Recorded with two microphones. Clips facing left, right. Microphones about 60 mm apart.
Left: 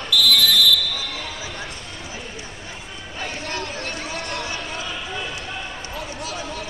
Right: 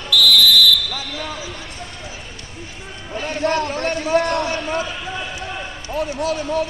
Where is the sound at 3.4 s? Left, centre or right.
Right.